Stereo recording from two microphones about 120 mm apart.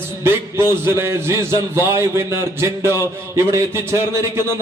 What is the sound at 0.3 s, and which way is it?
A man's voice, 20° right (ahead or behind).